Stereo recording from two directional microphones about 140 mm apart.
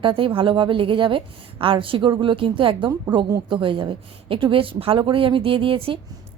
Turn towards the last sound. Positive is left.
turn(degrees=-40)  # may be behind; listen again after turning